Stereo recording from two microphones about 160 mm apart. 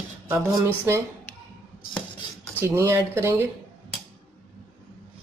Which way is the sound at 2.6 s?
15° right (ahead or behind).